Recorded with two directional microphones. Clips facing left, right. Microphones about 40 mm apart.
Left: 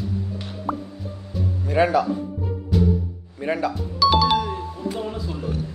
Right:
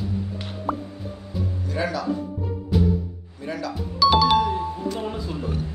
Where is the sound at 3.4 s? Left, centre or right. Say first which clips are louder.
Left 6 dB; left.